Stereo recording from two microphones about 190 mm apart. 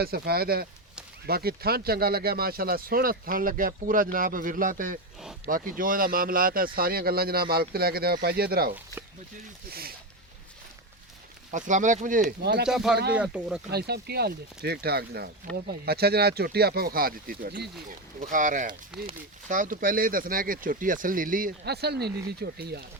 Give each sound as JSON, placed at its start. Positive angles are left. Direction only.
{"t": 0.0, "sound": "speech", "side_deg": -55}
{"t": 11.5, "sound": "speech", "side_deg": -40}
{"t": 12.4, "sound": "speech", "side_deg": -60}
{"t": 12.6, "sound": "speech", "side_deg": -5}
{"t": 13.7, "sound": "speech", "side_deg": -55}
{"t": 18.2, "sound": "speech", "side_deg": -45}